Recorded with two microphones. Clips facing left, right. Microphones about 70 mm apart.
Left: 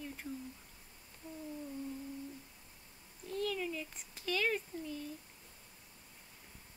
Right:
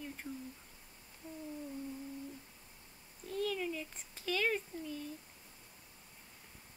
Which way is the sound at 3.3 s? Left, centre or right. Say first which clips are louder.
Right 1 dB; centre.